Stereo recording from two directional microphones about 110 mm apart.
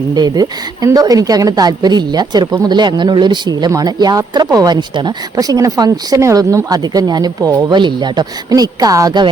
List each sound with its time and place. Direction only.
0.1 s speech: 35° right (ahead or behind)